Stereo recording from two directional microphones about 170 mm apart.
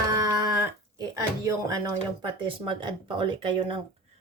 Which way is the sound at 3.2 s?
30° right (ahead or behind).